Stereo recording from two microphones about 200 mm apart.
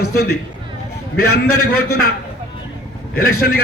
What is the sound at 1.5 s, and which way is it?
Speech, 90° left.